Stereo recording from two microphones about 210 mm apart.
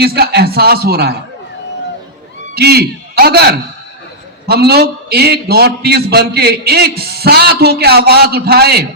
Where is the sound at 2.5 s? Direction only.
50° right (ahead or behind).